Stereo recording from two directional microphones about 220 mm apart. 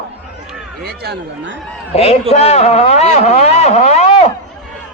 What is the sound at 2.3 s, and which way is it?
A man's voice, 30° left (ahead or behind).